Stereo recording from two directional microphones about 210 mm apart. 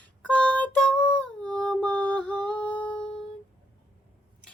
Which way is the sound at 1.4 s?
5° left (ahead or behind).